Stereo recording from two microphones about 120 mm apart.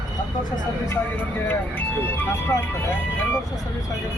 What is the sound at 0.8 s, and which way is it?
Speech, 20° left (ahead or behind).